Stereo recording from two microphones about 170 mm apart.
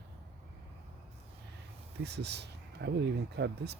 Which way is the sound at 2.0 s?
80° right.